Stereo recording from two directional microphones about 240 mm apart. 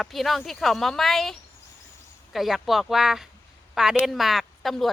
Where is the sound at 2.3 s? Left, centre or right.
Centre.